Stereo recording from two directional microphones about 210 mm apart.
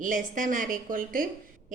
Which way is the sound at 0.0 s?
40° right (ahead or behind).